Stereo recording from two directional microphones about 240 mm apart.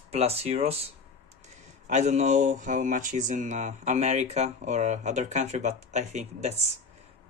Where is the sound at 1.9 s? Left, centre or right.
Right.